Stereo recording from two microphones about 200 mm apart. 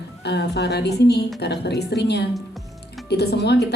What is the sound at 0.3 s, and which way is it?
A woman's voice, 55° left (ahead or behind).